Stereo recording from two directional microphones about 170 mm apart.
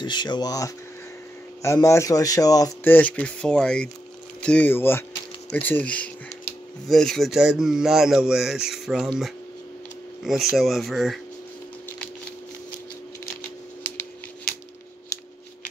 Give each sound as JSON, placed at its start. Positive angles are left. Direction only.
{"t": 0.0, "sound": "speech", "side_deg": 25}
{"t": 10.2, "sound": "speech", "side_deg": 0}